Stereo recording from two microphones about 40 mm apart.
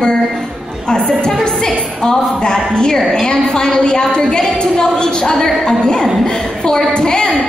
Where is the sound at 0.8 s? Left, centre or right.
Left.